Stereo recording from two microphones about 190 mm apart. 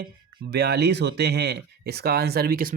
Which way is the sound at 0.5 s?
60° right (ahead or behind).